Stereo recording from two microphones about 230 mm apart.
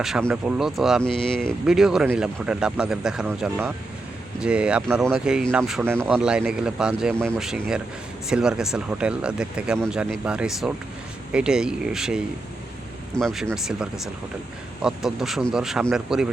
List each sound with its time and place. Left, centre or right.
0.0 s speech: centre